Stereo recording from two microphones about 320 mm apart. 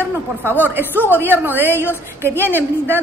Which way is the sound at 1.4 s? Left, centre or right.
Centre.